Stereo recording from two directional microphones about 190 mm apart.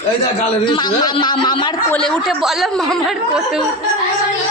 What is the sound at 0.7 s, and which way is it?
Speech, 25° left (ahead or behind).